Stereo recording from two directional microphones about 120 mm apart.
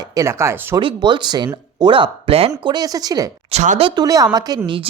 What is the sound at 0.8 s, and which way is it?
Speech, 40° right (ahead or behind).